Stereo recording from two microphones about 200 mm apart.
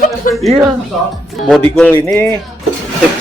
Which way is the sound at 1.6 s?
10° left (ahead or behind).